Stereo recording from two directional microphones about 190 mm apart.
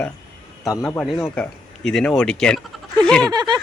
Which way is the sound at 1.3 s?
5° left (ahead or behind).